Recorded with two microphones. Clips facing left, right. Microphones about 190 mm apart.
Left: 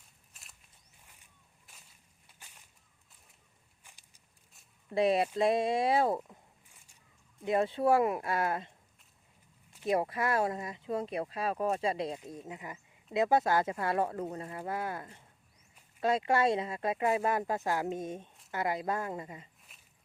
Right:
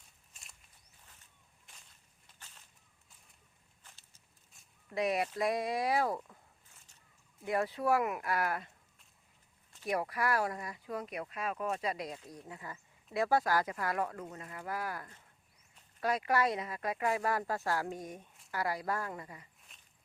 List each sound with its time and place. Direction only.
1.0 s a sound: 10° left (ahead or behind)
3.8 s walk: 15° left (ahead or behind)
4.9 s speech: 30° left (ahead or behind)
7.4 s speech: 25° left (ahead or behind)
9.8 s speech: 25° left (ahead or behind)
19.7 s a sound: 5° left (ahead or behind)